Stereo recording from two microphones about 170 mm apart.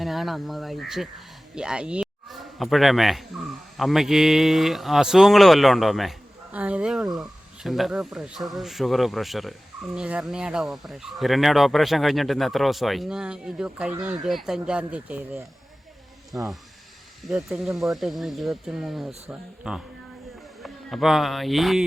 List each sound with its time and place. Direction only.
0.0 s speech: centre (ahead or behind)
16.3 s speech: 20° right (ahead or behind)
17.2 s speech: centre (ahead or behind)